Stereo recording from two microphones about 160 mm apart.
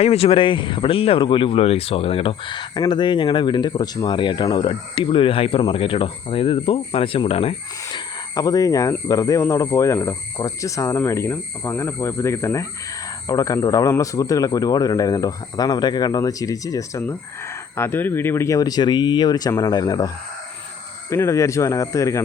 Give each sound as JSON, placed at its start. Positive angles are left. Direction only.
{"t": 0.0, "sound": "speech", "side_deg": 40}
{"t": 7.9, "sound": "speech", "side_deg": 20}
{"t": 21.1, "sound": "speech", "side_deg": 20}